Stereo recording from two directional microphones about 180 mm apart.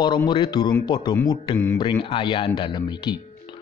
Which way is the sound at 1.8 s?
30° left (ahead or behind).